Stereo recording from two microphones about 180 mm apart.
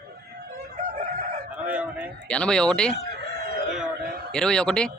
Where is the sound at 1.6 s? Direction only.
5° right (ahead or behind).